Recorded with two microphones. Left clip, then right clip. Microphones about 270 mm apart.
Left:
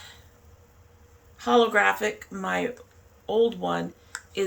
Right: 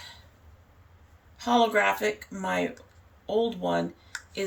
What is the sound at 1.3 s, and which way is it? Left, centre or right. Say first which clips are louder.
Speech: left 2 dB; centre.